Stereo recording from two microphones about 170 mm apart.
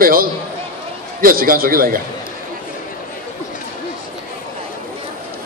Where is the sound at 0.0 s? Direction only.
60° right (ahead or behind).